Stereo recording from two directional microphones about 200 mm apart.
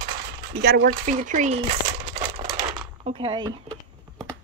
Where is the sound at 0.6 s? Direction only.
50° right (ahead or behind).